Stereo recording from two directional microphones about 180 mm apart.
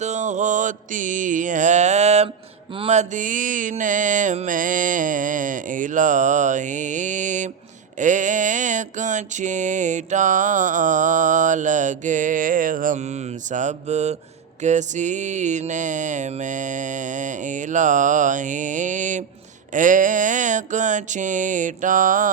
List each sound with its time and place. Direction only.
0.0 s mantra: 40° right (ahead or behind)